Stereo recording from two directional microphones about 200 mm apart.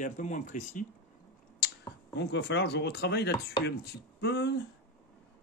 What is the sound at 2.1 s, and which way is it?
Speech, 60° left (ahead or behind).